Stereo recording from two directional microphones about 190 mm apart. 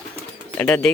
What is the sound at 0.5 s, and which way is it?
Speech, 10° left (ahead or behind).